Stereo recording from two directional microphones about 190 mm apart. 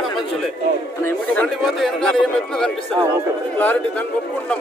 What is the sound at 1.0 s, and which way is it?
Speech, 10° left (ahead or behind).